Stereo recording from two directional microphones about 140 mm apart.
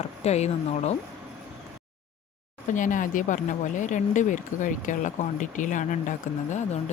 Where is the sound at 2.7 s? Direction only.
65° left (ahead or behind).